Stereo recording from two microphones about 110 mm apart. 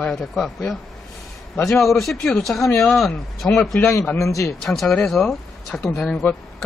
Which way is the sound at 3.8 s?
20° left (ahead or behind).